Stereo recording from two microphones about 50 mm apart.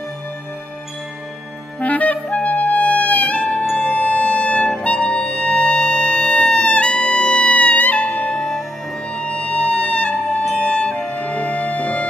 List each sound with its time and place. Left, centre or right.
1.8 s clarinet: left
3.7 s music: left